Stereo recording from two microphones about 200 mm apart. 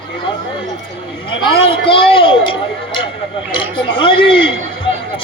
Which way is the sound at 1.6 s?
25° left (ahead or behind).